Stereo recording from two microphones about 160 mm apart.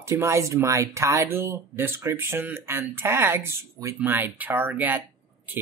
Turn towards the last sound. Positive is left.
turn(degrees=-10)  # may be behind; listen again after turning